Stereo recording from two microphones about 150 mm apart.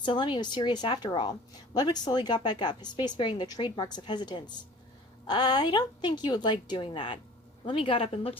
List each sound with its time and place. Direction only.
0.0 s a woman's voice: 30° left (ahead or behind)